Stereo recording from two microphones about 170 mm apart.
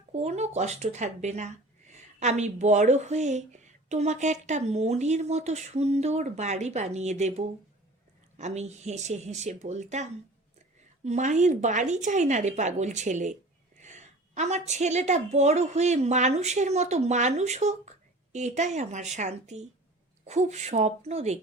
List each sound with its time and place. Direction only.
0.1 s a woman's voice: 40° right (ahead or behind)